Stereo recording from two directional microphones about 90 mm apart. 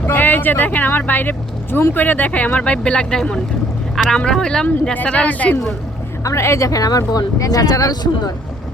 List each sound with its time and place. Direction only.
0.0 s speech: 20° left (ahead or behind)
6.2 s speech: 30° left (ahead or behind)